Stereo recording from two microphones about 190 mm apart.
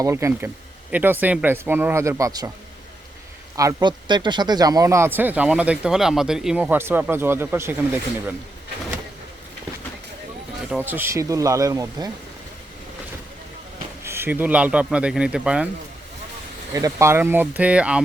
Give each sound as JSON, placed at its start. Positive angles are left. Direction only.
{"t": 0.0, "sound": "speech", "side_deg": -15}
{"t": 3.5, "sound": "speech", "side_deg": -15}
{"t": 10.7, "sound": "speech", "side_deg": -10}
{"t": 14.0, "sound": "speech", "side_deg": -10}
{"t": 16.7, "sound": "speech", "side_deg": -15}